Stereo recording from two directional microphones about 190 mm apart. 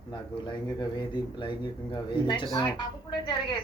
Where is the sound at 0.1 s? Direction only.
25° left (ahead or behind).